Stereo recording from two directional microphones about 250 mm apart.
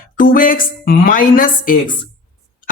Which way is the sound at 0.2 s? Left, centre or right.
Left.